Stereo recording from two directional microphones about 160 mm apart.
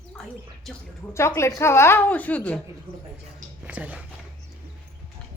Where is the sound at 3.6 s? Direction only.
10° right (ahead or behind).